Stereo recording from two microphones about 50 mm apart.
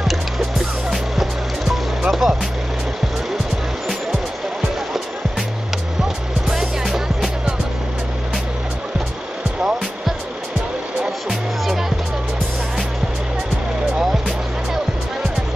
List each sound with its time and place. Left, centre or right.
0.0 s music: centre
6.5 s music: centre
11.0 s music: centre